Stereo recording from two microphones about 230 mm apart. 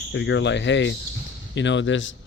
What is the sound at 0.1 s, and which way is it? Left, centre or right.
A man's voice, left.